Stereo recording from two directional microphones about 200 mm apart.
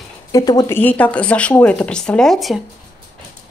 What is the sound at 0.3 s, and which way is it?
Speech, 20° left (ahead or behind).